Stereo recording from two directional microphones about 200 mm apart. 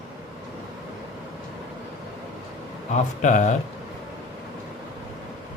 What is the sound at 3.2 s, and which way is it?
Speech, 40° left (ahead or behind).